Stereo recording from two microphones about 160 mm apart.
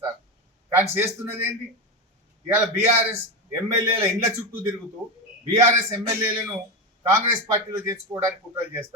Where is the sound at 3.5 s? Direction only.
20° right (ahead or behind).